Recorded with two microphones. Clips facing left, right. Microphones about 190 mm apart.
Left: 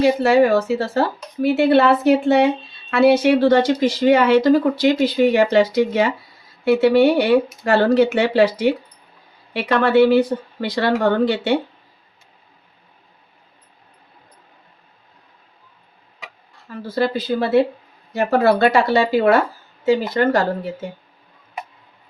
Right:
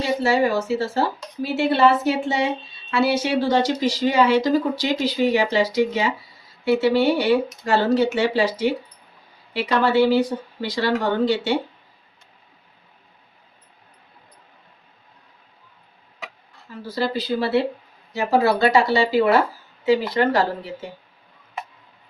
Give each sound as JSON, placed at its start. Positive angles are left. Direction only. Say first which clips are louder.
{"t": 0.0, "sound": "speech", "louder": "left 6 dB", "side_deg": 60}
{"t": 16.7, "sound": "speech", "louder": "left 4 dB", "side_deg": 55}